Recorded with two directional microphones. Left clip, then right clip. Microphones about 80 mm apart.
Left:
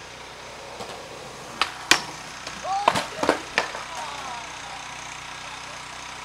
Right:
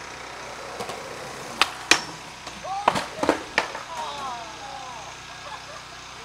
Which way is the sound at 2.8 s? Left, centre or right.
Centre.